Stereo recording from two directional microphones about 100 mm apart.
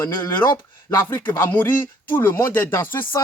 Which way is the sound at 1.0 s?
20° left (ahead or behind).